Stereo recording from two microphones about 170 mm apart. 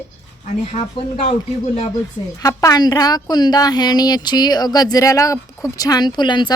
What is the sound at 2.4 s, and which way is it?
A woman's voice, 20° left (ahead or behind).